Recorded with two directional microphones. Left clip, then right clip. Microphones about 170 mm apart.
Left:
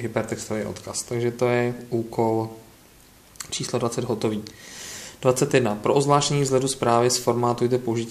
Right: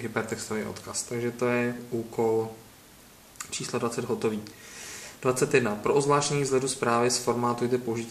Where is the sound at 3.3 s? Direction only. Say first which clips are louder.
Left 5 dB; 40° left (ahead or behind).